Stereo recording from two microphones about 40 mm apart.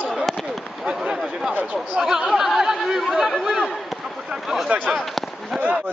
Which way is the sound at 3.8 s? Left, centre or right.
Centre.